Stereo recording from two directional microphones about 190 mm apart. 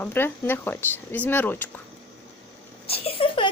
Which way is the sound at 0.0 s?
10° left (ahead or behind).